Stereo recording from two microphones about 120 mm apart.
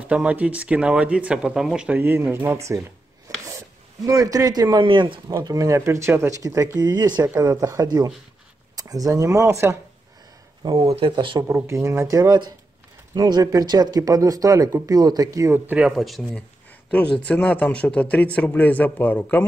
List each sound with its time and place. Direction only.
0.0 s speech: 10° right (ahead or behind)
2.0 s speech: 15° right (ahead or behind); by 5.2 s 45° right (ahead or behind)
5.3 s speech: 30° right (ahead or behind)
7.2 s speech: 25° right (ahead or behind)
10.8 s speech: 50° right (ahead or behind)
11.6 s speech: 20° right (ahead or behind)
15.9 s a man's voice: centre (ahead or behind)